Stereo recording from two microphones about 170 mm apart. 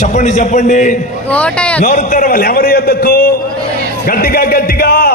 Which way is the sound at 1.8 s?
45° left (ahead or behind).